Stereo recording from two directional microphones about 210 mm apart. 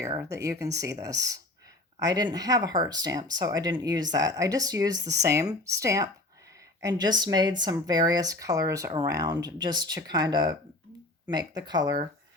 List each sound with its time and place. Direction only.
0.0 s speech: 15° right (ahead or behind)